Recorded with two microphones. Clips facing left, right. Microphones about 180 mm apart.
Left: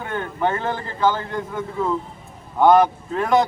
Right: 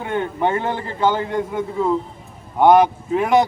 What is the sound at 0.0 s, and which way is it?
Speech, 20° right (ahead or behind).